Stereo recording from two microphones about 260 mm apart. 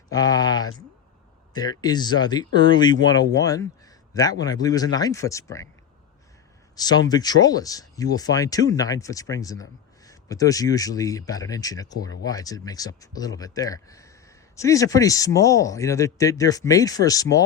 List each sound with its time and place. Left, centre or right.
0.1 s a sound: centre
1.5 s speech: centre
6.7 s speech: centre